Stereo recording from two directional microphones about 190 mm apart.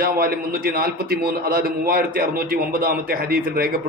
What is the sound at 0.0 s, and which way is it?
A man's voice, 50° right (ahead or behind).